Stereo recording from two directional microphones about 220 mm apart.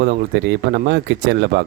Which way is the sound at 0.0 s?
45° right (ahead or behind).